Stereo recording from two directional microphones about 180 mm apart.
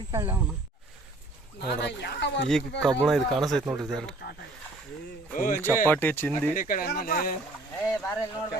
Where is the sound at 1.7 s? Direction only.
65° left (ahead or behind).